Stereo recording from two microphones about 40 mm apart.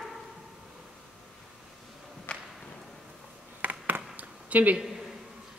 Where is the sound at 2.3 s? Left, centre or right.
Left.